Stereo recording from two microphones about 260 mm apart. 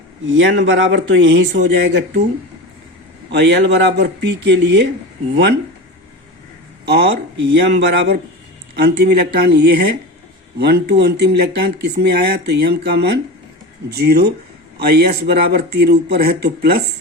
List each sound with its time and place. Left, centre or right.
0.3 s speech: right
3.3 s speech: right
6.8 s speech: right